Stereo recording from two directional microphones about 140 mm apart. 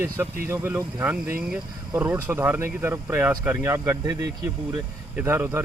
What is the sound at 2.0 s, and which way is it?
Speech, 15° right (ahead or behind).